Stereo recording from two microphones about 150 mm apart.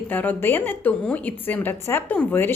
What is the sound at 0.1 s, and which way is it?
A woman's voice, 10° left (ahead or behind).